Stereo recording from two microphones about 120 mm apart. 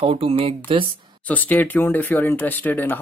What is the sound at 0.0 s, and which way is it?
Speech, 55° right (ahead or behind).